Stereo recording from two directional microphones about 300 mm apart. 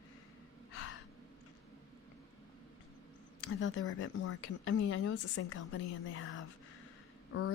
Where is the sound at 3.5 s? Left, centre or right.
Left.